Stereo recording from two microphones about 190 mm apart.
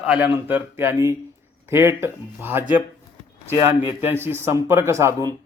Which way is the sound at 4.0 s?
10° right (ahead or behind).